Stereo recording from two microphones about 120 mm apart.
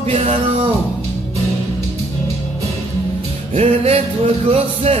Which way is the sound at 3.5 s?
60° right (ahead or behind).